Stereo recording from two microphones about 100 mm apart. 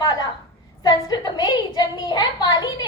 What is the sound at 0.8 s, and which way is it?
A woman's voice, 45° left (ahead or behind).